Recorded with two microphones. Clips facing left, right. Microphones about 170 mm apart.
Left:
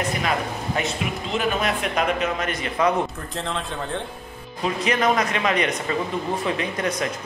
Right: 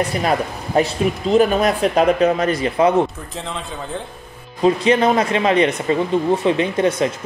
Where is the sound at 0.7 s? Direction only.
40° right (ahead or behind).